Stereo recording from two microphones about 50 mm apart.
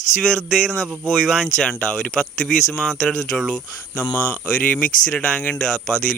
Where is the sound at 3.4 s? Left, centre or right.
Left.